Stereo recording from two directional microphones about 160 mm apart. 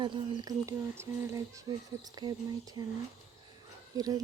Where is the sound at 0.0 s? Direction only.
20° right (ahead or behind).